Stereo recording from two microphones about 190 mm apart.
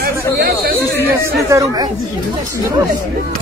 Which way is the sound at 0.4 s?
55° right (ahead or behind).